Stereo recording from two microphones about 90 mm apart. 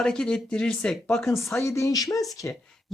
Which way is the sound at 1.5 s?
30° left (ahead or behind).